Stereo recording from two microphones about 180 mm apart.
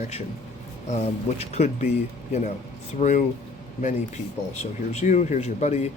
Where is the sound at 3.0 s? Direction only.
35° left (ahead or behind).